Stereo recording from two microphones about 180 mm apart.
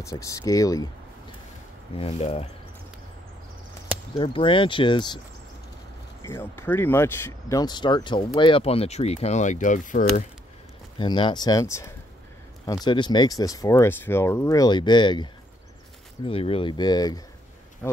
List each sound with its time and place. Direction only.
0.0 s speech: 20° left (ahead or behind)
2.0 s speech: 35° left (ahead or behind)
4.2 s speech: 30° left (ahead or behind)
6.2 s speech: 15° left (ahead or behind); by 10.2 s 45° left (ahead or behind)
11.0 s speech: 25° left (ahead or behind)
16.3 s speech: 30° left (ahead or behind)